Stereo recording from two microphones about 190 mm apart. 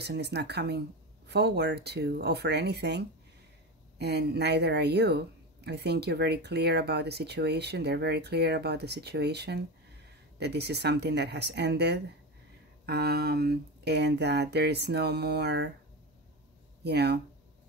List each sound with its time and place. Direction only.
0.0 s speech: 60° right (ahead or behind)
16.8 s speech: 60° right (ahead or behind)